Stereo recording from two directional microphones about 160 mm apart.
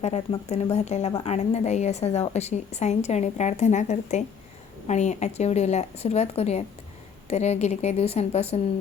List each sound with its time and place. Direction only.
0.3 s a woman's voice: 40° left (ahead or behind)